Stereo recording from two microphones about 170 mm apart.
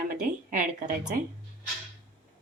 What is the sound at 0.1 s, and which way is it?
Speech, 55° right (ahead or behind).